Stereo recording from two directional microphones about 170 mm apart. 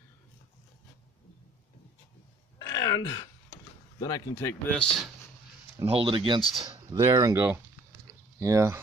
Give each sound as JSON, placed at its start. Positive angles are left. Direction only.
{"t": 2.6, "sound": "a sound", "side_deg": 20}
{"t": 4.0, "sound": "speech", "side_deg": 20}
{"t": 4.7, "sound": "speech", "side_deg": 5}
{"t": 5.9, "sound": "speech", "side_deg": -30}
{"t": 6.4, "sound": "speech", "side_deg": 0}
{"t": 6.9, "sound": "speech", "side_deg": -20}